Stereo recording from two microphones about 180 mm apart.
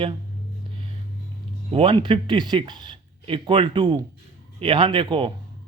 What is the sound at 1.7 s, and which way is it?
Speech, 30° right (ahead or behind).